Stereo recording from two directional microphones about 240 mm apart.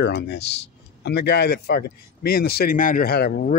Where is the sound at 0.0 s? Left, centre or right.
Left.